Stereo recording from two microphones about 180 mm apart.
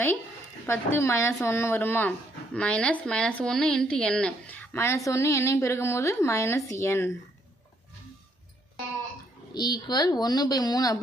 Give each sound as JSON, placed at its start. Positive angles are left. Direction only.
{"t": 0.7, "sound": "speech", "side_deg": 15}
{"t": 9.5, "sound": "speech", "side_deg": 25}